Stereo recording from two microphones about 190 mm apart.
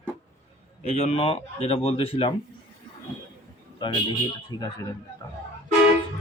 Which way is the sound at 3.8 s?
25° left (ahead or behind).